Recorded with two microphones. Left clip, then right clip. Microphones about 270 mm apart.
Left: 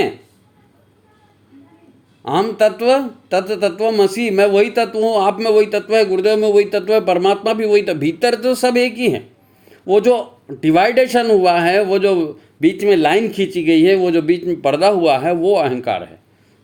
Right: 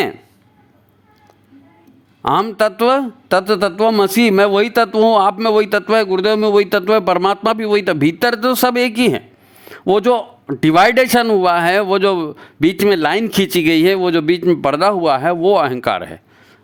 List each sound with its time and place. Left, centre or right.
2.2 s a man's voice: right